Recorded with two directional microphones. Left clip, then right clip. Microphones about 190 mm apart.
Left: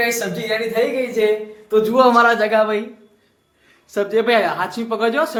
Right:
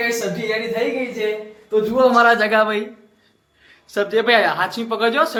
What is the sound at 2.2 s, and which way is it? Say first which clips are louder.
Speech: even; centre (ahead or behind).